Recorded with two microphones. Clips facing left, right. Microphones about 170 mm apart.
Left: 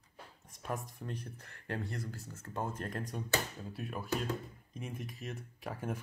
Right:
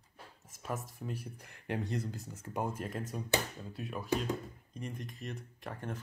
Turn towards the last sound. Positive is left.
turn(degrees=5)  # may be behind; listen again after turning